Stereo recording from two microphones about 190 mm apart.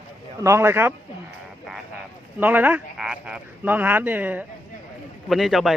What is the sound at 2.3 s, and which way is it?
A man's voice, 10° right (ahead or behind).